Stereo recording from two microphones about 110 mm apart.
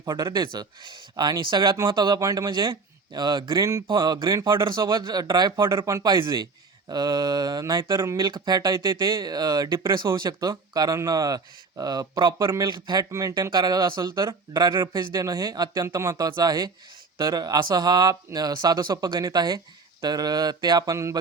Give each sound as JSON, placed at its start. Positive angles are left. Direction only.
{"t": 0.0, "sound": "speech", "side_deg": -35}
{"t": 5.6, "sound": "speech", "side_deg": -30}
{"t": 8.2, "sound": "speech", "side_deg": -40}